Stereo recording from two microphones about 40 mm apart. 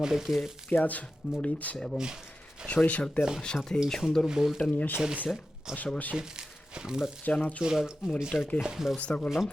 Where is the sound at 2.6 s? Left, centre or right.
Centre.